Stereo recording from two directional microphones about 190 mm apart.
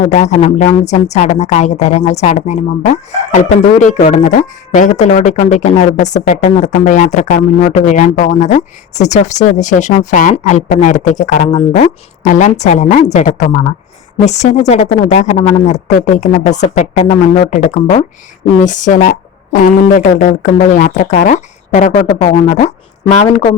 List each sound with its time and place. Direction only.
0.0 s speech: 35° left (ahead or behind)